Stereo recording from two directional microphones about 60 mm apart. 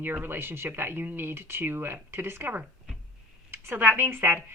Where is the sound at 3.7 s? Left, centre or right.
Right.